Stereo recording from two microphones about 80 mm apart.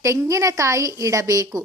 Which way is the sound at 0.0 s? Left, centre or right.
Right.